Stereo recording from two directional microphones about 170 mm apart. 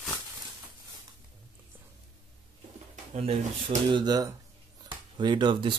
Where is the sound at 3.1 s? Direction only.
40° right (ahead or behind).